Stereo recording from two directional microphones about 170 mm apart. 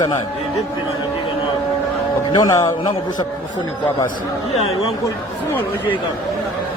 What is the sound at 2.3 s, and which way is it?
Speech, 20° left (ahead or behind).